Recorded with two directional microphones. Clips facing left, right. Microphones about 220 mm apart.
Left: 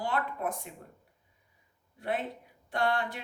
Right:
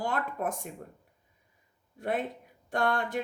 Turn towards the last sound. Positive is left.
turn(degrees=-45)  # may be behind; listen again after turning